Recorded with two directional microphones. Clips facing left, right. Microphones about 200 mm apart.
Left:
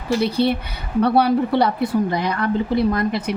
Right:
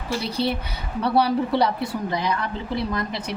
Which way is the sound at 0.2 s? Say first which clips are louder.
Left 5 dB; 60° left (ahead or behind).